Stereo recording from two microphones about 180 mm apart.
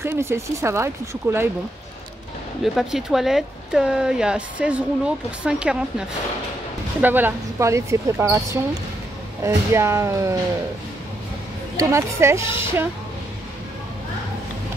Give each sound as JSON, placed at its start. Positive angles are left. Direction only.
{"t": 0.0, "sound": "speech", "side_deg": -15}
{"t": 2.6, "sound": "speech", "side_deg": 0}
{"t": 11.7, "sound": "speech", "side_deg": -15}